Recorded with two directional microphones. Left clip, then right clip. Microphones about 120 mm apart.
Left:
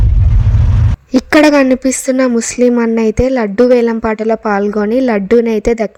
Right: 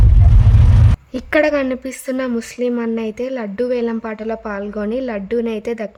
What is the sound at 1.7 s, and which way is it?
Speech, 50° left (ahead or behind).